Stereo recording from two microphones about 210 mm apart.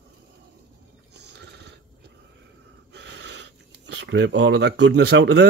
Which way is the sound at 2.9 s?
55° right (ahead or behind).